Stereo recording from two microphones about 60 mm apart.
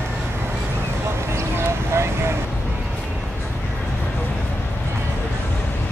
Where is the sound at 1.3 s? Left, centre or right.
Right.